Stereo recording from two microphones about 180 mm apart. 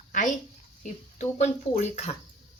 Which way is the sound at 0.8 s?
40° left (ahead or behind).